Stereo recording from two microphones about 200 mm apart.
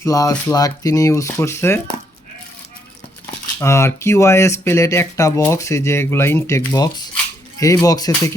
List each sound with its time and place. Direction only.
0.0 s speech: 15° left (ahead or behind)
3.6 s speech: 15° left (ahead or behind)